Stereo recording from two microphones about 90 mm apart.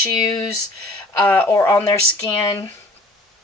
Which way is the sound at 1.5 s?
30° left (ahead or behind).